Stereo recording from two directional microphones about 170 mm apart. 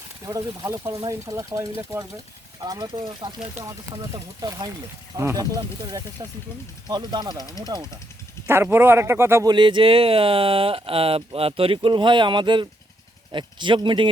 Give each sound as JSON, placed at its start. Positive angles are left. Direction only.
{"t": 0.3, "sound": "speech", "side_deg": -20}